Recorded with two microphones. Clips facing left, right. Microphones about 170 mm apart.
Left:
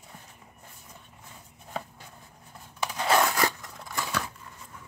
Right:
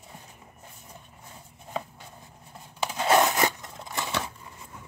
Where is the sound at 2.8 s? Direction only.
20° right (ahead or behind).